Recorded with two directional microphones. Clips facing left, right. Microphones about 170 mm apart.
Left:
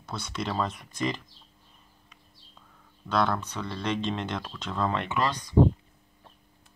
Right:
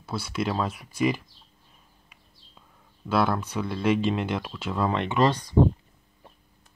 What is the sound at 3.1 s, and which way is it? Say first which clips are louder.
Speech: right 2 dB; 5° right (ahead or behind).